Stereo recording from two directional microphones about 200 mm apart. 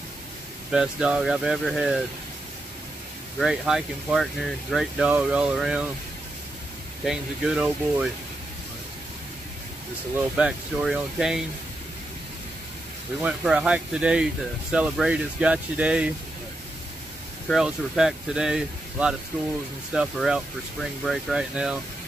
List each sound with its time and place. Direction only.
0.7 s speech: 5° right (ahead or behind)
3.3 s speech: centre (ahead or behind)
7.1 s speech: centre (ahead or behind)
10.3 s speech: 5° right (ahead or behind)
13.2 s speech: 5° right (ahead or behind)
17.5 s speech: centre (ahead or behind)